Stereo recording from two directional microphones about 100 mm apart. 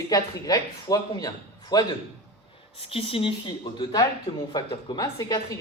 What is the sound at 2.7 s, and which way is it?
Speech, 70° left (ahead or behind).